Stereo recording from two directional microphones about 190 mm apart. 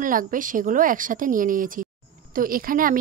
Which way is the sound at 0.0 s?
45° right (ahead or behind).